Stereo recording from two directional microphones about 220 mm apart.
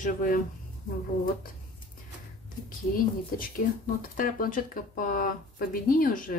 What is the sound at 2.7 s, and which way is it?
Speech, 40° left (ahead or behind).